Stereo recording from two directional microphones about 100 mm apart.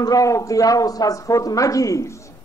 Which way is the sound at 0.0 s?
35° left (ahead or behind).